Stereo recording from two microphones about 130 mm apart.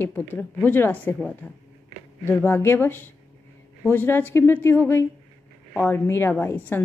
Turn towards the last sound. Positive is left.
turn(degrees=15)  # may be behind; listen again after turning